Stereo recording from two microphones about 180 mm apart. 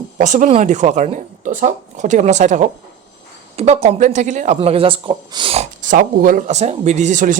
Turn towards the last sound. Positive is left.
turn(degrees=-45)  # may be behind; listen again after turning